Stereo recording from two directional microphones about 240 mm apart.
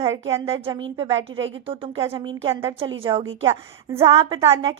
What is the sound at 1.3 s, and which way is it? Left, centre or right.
Speech, right.